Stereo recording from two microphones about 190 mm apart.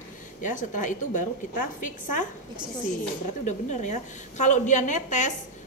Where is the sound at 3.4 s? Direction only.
40° left (ahead or behind).